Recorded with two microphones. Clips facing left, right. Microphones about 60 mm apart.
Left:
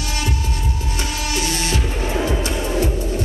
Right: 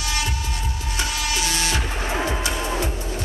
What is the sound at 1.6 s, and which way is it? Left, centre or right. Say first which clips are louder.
Music: left 2 dB; right.